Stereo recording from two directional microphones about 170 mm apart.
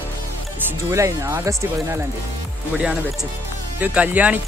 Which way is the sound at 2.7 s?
5° right (ahead or behind).